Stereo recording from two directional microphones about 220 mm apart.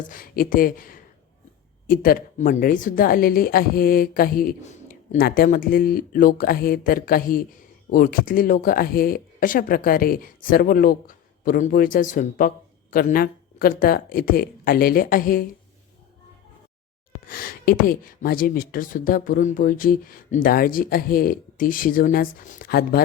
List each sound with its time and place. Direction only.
0.0 s speech: 40° left (ahead or behind)
17.2 s speech: 40° left (ahead or behind)